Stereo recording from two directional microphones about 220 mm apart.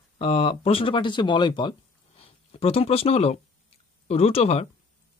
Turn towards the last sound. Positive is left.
turn(degrees=30)  # may be behind; listen again after turning